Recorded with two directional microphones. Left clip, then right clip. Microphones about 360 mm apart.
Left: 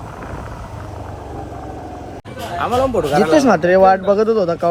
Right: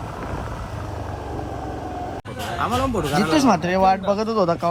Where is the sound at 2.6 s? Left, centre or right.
Centre.